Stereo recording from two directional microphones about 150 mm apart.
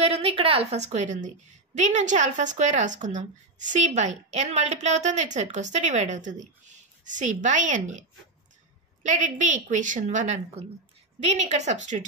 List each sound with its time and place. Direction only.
0.0 s a woman's voice: 40° right (ahead or behind)
9.0 s a woman's voice: 55° right (ahead or behind)